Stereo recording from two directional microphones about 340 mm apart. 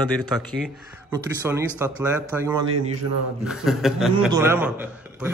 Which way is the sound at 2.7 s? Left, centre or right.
Right.